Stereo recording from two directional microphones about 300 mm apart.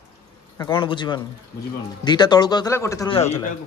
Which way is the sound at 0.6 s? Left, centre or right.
Centre.